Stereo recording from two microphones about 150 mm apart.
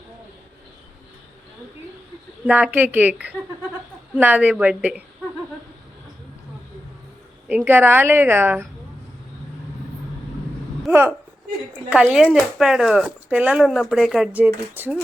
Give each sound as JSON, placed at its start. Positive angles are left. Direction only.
{"t": 2.5, "sound": "a woman's voice", "side_deg": -10}
{"t": 7.4, "sound": "a woman's voice", "side_deg": -10}
{"t": 11.9, "sound": "a woman's voice", "side_deg": -5}